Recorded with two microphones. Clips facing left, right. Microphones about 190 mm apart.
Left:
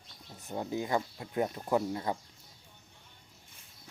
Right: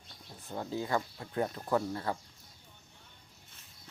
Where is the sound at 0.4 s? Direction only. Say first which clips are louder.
Left 2 dB; 15° left (ahead or behind).